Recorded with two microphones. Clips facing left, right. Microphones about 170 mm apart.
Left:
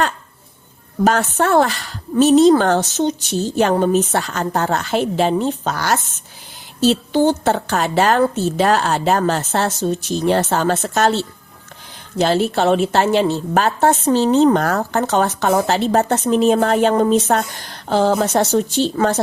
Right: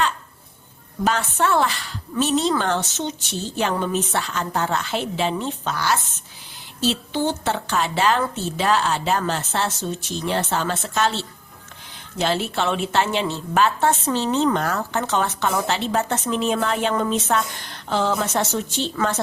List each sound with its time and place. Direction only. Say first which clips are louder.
1.0 s a woman's voice: left 5 dB; 45° left (ahead or behind)